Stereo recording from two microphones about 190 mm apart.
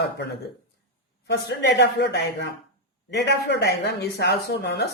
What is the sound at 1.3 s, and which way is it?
Speech, 60° left (ahead or behind).